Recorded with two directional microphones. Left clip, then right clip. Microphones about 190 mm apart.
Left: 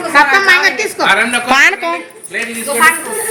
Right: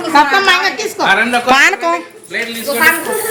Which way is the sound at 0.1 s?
30° right (ahead or behind).